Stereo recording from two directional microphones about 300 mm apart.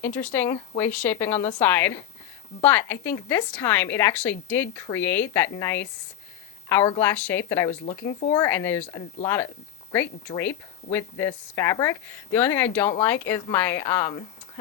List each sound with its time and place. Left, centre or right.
0.0 s speech: centre
7.7 s speech: centre